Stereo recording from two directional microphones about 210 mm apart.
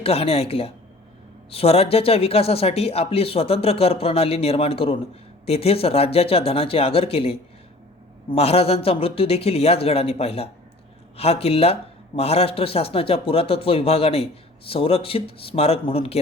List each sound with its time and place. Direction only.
0.0 s speech: 30° left (ahead or behind)